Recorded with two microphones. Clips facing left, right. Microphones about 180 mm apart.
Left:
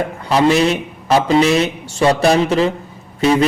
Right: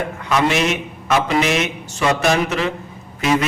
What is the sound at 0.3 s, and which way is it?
Speech, 35° left (ahead or behind).